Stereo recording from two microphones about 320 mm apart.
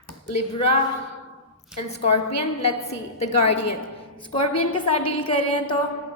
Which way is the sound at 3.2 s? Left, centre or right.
Centre.